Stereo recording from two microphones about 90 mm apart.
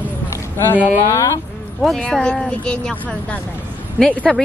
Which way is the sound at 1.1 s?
35° left (ahead or behind).